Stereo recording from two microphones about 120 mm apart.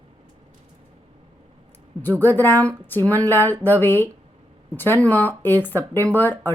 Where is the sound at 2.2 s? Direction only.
15° left (ahead or behind).